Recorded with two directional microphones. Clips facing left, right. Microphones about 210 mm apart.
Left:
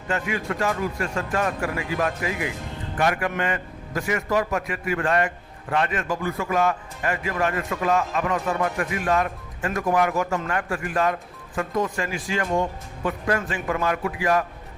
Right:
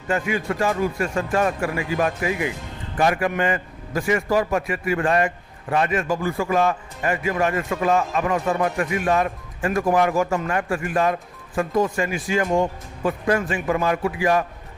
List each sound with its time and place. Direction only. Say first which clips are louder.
0.1 s a man's voice: right 3 dB; 25° right (ahead or behind)